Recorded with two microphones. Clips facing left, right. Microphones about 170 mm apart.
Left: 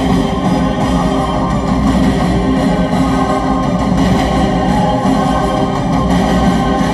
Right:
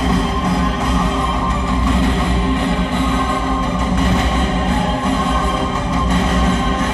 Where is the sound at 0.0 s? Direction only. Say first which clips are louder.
Left 5 dB; 30° left (ahead or behind).